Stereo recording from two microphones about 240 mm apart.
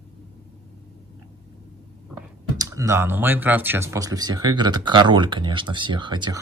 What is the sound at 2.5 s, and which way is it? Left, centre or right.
Speech, centre.